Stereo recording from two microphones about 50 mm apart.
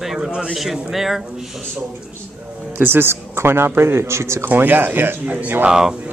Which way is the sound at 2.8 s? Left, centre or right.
Right.